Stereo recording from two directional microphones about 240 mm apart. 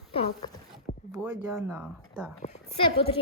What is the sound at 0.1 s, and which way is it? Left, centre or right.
Speech, left.